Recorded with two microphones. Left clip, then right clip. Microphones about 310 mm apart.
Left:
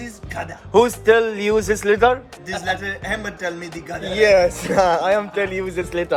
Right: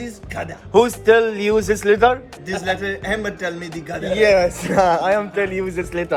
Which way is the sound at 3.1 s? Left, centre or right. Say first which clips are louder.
Right 1 dB; centre.